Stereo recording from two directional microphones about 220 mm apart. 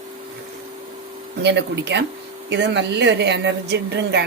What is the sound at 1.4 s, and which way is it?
A woman's voice, 50° right (ahead or behind).